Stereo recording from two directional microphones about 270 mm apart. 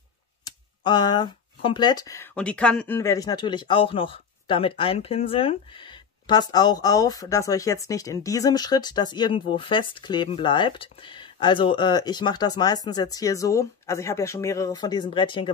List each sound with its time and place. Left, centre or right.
0.4 s speech: centre